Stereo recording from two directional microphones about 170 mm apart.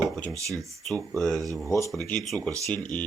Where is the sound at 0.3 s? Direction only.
20° right (ahead or behind).